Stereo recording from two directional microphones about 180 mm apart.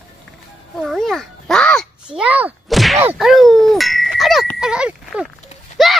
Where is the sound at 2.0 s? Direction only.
5° right (ahead or behind).